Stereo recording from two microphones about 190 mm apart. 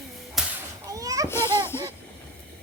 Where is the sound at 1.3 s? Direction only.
15° left (ahead or behind).